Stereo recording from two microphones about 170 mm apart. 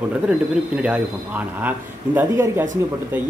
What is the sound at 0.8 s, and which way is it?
Speech, 10° right (ahead or behind).